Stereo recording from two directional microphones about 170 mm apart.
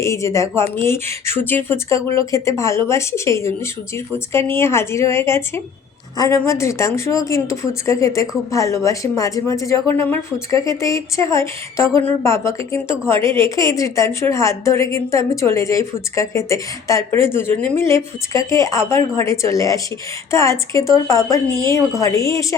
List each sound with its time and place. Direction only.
0.0 s a woman's voice: 15° left (ahead or behind)